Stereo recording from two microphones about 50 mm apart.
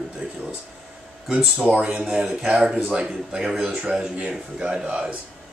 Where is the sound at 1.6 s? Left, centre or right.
Right.